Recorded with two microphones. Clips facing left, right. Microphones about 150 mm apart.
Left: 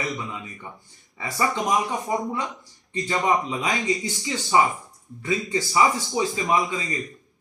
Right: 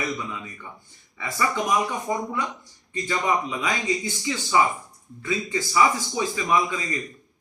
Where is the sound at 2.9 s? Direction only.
30° left (ahead or behind).